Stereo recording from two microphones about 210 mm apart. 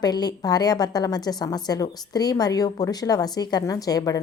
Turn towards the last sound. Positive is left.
turn(degrees=15)  # may be behind; listen again after turning